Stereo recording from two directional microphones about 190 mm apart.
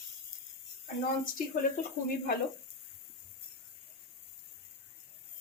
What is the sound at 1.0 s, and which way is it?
Speech, 45° left (ahead or behind).